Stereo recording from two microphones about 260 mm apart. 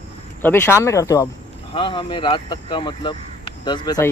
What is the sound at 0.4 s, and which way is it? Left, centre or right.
Speech, centre.